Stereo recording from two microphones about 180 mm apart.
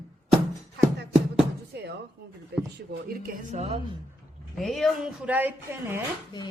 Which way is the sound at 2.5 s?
70° right (ahead or behind).